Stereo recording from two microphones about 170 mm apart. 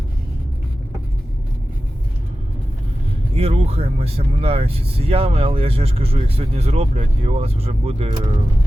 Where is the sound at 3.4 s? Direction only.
35° right (ahead or behind).